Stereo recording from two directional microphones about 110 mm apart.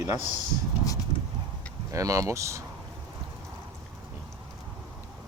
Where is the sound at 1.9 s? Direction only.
30° right (ahead or behind).